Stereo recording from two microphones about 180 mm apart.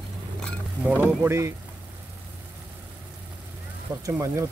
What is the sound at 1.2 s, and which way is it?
Speech, 15° right (ahead or behind).